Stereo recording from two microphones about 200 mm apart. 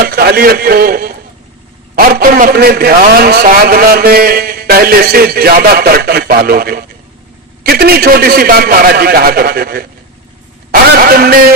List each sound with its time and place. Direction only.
0.0 s a man's voice: 50° right (ahead or behind)